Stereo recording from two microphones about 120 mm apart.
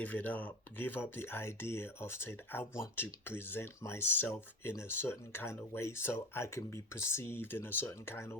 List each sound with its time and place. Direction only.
0.0 s speech: 15° left (ahead or behind)